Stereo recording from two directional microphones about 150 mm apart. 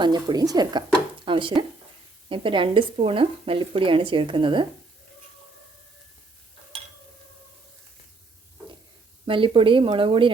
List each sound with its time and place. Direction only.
0.0 s speech: 30° right (ahead or behind)
9.2 s speech: 35° right (ahead or behind)